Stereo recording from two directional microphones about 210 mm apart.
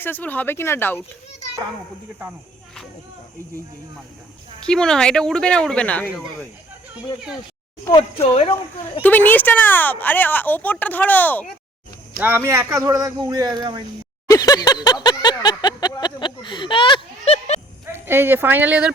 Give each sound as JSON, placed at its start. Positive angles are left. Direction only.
{"t": 0.0, "sound": "speech", "side_deg": 10}
{"t": 4.6, "sound": "speech", "side_deg": 5}
{"t": 8.2, "sound": "speech", "side_deg": 30}
{"t": 9.0, "sound": "speech", "side_deg": 10}
{"t": 12.1, "sound": "a man's voice", "side_deg": -10}
{"t": 14.3, "sound": "a sound", "side_deg": 15}
{"t": 17.9, "sound": "a man's voice", "side_deg": -10}